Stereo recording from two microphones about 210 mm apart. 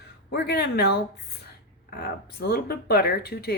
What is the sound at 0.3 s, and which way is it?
Speech, 50° left (ahead or behind).